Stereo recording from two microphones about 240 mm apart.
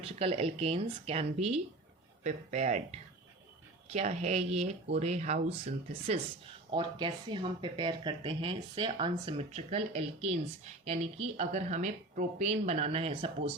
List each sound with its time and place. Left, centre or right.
0.0 s speech: right
3.8 s speech: right